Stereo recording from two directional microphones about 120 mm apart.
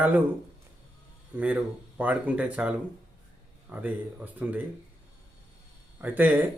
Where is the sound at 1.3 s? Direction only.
10° right (ahead or behind).